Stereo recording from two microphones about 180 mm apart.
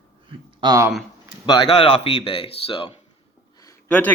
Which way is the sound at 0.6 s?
20° right (ahead or behind).